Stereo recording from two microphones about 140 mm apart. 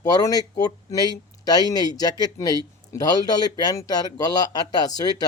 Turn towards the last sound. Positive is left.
turn(degrees=30)  # may be behind; listen again after turning